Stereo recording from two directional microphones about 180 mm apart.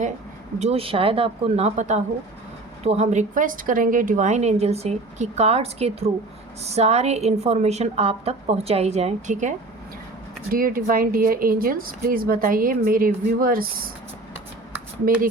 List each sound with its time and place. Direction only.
0.6 s a woman's voice: 35° right (ahead or behind)
10.5 s speech: 55° right (ahead or behind)